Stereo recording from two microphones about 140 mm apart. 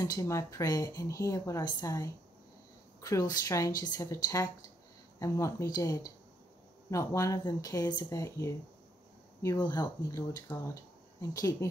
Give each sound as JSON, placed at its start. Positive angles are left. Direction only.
{"t": 0.0, "sound": "speech", "side_deg": 25}